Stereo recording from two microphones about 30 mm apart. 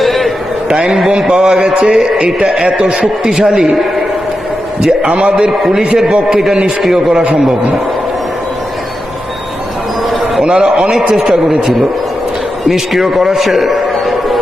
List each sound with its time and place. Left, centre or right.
0.0 s a sound: centre
1.1 s a man's voice: right
2.0 s a man's voice: right
5.0 s a man's voice: right
5.5 s a man's voice: centre
10.4 s a man's voice: right
11.1 s a man's voice: centre